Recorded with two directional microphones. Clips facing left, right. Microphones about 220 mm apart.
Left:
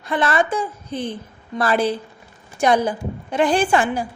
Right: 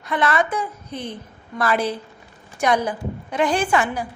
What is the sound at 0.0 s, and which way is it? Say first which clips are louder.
A woman's voice: left 1 dB; 30° left (ahead or behind).